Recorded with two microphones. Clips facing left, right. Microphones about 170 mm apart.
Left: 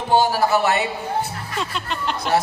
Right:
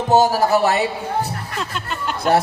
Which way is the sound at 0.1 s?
40° right (ahead or behind).